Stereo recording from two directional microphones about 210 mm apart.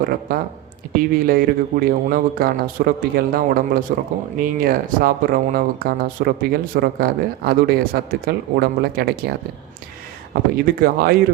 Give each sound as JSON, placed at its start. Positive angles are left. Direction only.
{"t": 0.0, "sound": "speech", "side_deg": -45}
{"t": 10.3, "sound": "speech", "side_deg": -45}